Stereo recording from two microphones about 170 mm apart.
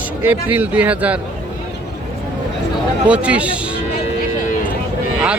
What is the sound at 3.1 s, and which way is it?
Speech, 5° right (ahead or behind).